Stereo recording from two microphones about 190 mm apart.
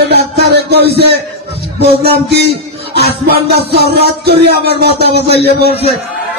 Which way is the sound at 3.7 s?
55° right (ahead or behind).